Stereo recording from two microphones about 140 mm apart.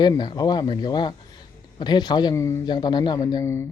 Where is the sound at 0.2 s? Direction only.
30° left (ahead or behind).